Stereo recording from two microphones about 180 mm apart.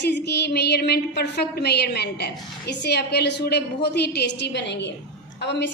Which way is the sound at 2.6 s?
65° left (ahead or behind).